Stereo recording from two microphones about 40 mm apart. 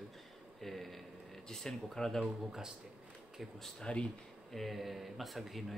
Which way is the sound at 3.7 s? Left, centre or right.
Left.